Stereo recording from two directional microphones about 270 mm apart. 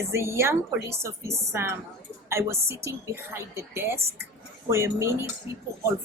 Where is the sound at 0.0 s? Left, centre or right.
Centre.